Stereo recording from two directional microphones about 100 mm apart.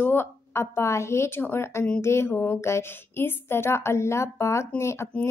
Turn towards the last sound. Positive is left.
turn(degrees=25)  # may be behind; listen again after turning